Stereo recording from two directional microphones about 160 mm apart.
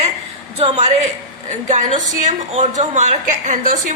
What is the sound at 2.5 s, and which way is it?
A woman's voice, 45° right (ahead or behind).